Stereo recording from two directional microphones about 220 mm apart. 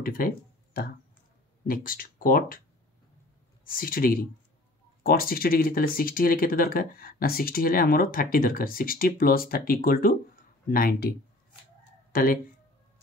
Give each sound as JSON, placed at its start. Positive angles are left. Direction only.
{"t": 0.0, "sound": "speech", "side_deg": 40}
{"t": 1.7, "sound": "speech", "side_deg": 40}
{"t": 3.6, "sound": "speech", "side_deg": 40}